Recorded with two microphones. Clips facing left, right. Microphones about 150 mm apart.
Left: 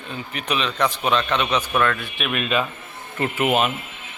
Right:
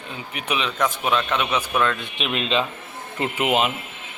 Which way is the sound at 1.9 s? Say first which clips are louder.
Even; 20° right (ahead or behind).